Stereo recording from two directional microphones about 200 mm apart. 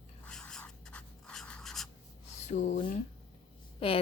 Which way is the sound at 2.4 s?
40° left (ahead or behind).